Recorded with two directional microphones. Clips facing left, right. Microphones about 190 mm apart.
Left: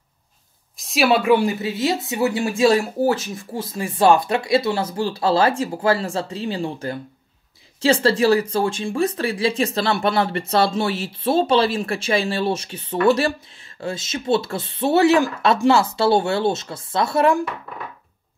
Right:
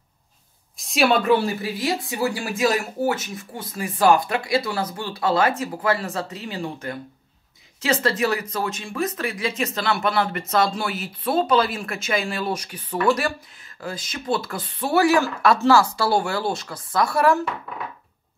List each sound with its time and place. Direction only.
0.7 s speech: centre (ahead or behind); by 17.4 s 25° left (ahead or behind)